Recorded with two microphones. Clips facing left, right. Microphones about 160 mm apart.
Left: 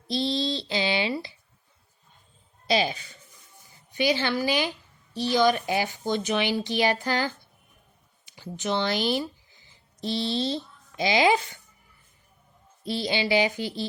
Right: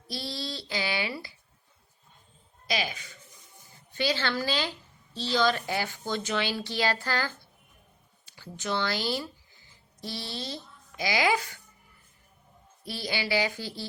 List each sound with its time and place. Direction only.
0.1 s a sound: 20° left (ahead or behind)
2.6 s speech: 30° left (ahead or behind)
3.9 s a woman's voice: 15° left (ahead or behind)
12.8 s speech: 20° left (ahead or behind)